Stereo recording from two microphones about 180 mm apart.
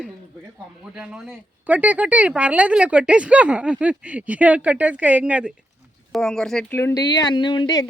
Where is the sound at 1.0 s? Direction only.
5° right (ahead or behind).